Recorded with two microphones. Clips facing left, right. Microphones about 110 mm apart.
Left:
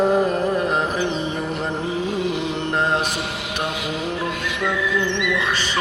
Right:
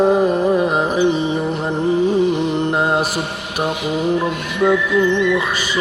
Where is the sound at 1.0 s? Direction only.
Centre (ahead or behind).